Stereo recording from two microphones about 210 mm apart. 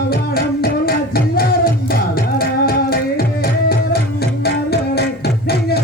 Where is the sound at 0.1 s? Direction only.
45° left (ahead or behind).